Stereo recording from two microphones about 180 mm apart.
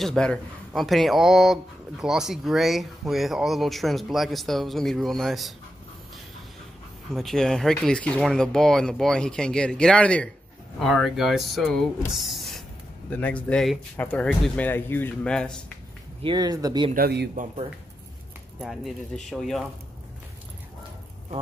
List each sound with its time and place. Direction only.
0.0 s speech: 5° left (ahead or behind)
7.2 s speech: 5° left (ahead or behind)
16.2 s speech: 25° right (ahead or behind)
16.9 s speech: 60° right (ahead or behind)
18.6 s speech: centre (ahead or behind)